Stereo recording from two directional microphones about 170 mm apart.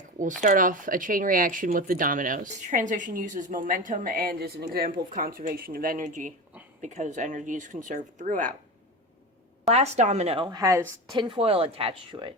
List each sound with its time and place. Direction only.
0.4 s speech: 50° right (ahead or behind)
9.6 s a woman's voice: 40° right (ahead or behind)